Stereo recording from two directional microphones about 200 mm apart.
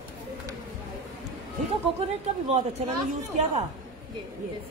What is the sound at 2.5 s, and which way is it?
Speech, 35° right (ahead or behind).